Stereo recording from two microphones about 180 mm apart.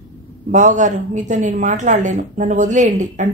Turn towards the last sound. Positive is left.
turn(degrees=-45)  # may be behind; listen again after turning